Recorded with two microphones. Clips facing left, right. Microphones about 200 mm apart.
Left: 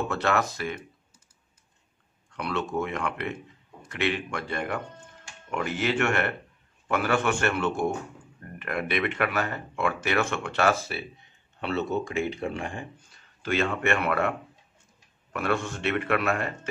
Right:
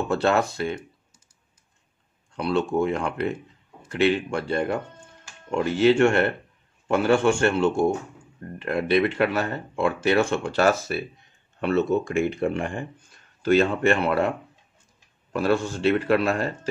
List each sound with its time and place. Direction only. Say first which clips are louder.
0.1 s speech: right 5 dB; 30° right (ahead or behind)
2.3 s a man's voice: right 6 dB; 30° right (ahead or behind)
11.6 s speech: right 6 dB; 50° right (ahead or behind); by 14.3 s 30° right (ahead or behind)
15.3 s a man's voice: right 5 dB; 30° right (ahead or behind)